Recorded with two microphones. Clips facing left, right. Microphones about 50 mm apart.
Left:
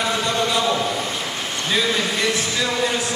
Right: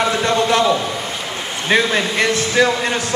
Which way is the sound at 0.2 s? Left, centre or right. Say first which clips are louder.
Right 5 dB; right.